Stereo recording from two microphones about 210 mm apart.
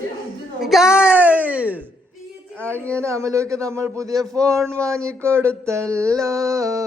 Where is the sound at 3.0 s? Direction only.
15° right (ahead or behind).